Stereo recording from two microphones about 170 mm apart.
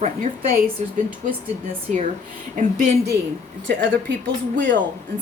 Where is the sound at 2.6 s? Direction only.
50° right (ahead or behind).